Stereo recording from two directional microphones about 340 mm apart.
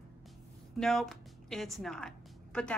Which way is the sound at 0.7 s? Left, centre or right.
Centre.